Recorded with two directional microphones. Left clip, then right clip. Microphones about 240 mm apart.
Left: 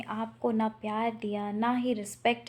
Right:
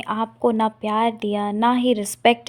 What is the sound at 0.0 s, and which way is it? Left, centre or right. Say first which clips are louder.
Speech: right 11 dB; right.